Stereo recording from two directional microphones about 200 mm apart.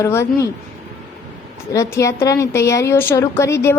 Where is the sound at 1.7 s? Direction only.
15° left (ahead or behind).